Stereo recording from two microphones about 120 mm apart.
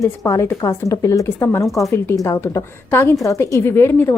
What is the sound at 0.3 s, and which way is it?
A woman's voice, 25° left (ahead or behind).